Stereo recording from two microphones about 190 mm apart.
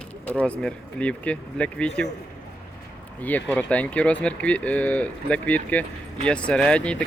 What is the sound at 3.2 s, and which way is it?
Speech, 10° left (ahead or behind).